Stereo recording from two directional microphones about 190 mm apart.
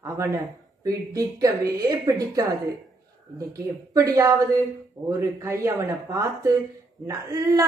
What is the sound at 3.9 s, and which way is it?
A man's voice, 15° right (ahead or behind).